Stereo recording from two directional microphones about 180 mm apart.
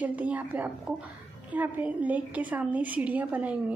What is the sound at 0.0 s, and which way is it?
A woman's voice, 10° right (ahead or behind).